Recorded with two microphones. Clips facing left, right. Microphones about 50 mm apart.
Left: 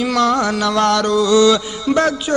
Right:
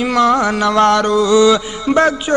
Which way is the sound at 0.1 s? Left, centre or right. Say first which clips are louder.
Right 4 dB; right.